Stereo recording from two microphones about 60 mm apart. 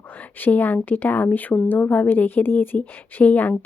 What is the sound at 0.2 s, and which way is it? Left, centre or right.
A woman's voice, left.